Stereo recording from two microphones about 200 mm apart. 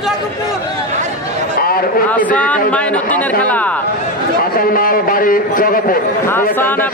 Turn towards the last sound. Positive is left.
turn(degrees=10)  # may be behind; listen again after turning